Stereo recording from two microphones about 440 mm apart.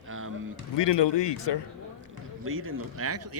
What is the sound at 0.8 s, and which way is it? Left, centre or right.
Speech, left.